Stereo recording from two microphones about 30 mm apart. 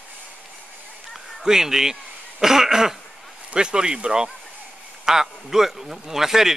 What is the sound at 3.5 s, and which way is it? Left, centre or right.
Speech, right.